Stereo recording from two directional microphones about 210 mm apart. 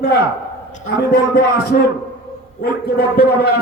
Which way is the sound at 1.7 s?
45° left (ahead or behind).